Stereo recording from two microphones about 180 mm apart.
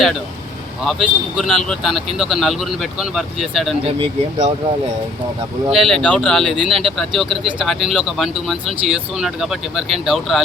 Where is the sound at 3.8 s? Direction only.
30° right (ahead or behind).